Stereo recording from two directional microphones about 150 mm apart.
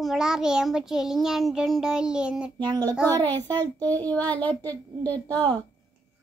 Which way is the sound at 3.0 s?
15° left (ahead or behind).